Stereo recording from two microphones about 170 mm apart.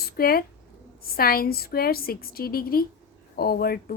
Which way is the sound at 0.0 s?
60° left (ahead or behind).